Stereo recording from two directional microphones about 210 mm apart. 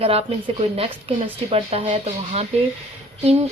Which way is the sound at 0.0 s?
25° right (ahead or behind).